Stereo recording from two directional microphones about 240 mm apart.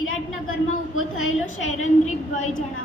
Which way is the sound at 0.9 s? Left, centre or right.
Left.